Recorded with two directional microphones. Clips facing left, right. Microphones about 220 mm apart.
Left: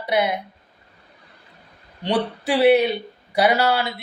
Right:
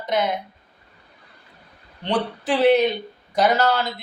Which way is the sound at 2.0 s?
10° left (ahead or behind).